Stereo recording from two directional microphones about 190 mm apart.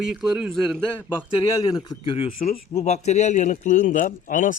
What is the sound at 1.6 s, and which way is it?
A man's voice, 20° left (ahead or behind).